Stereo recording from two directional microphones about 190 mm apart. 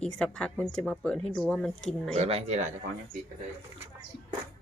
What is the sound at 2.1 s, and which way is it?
Speech, 35° right (ahead or behind).